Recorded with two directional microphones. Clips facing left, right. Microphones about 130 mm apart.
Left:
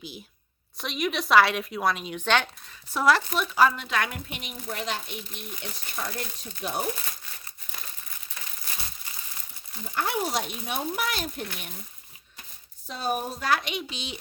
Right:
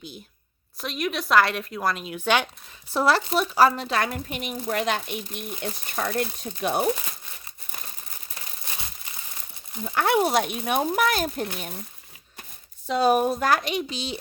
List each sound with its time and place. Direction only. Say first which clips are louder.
0.8 s speech: even; centre (ahead or behind)
2.9 s speech: right 1 dB; 30° right (ahead or behind)
4.7 s speech: right 6 dB; 65° right (ahead or behind)
9.8 s speech: right 7 dB; 70° right (ahead or behind); by 11.4 s 45° right (ahead or behind)
12.9 s speech: right 9 dB; 85° right; by 13.5 s 65° right (ahead or behind)
13.5 s speech: right 4 dB; 40° right (ahead or behind)